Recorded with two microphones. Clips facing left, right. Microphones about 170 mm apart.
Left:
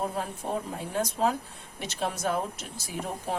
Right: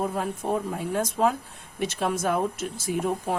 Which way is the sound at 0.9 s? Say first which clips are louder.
Right 2 dB; 50° right (ahead or behind).